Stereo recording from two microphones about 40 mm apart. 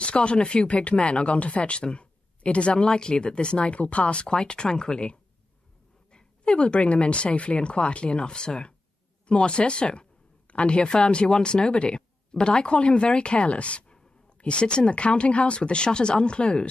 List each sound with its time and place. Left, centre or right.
0.0 s speech: left